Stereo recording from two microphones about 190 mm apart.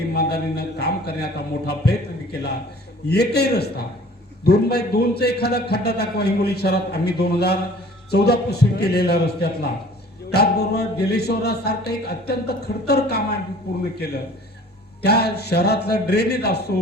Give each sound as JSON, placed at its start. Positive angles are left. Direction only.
{"t": 0.1, "sound": "a man's voice", "side_deg": 55}
{"t": 3.1, "sound": "a man's voice", "side_deg": 60}